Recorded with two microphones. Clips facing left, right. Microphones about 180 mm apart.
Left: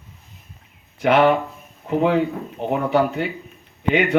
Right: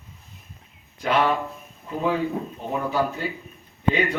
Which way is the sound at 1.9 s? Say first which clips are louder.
Left 6 dB; 70° left (ahead or behind).